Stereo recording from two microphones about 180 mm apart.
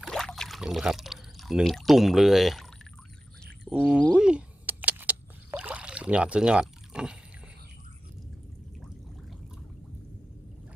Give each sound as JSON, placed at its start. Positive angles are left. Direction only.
{"t": 0.0, "sound": "speech", "side_deg": 0}
{"t": 3.4, "sound": "a sound", "side_deg": -5}
{"t": 4.1, "sound": "vehicle", "side_deg": -5}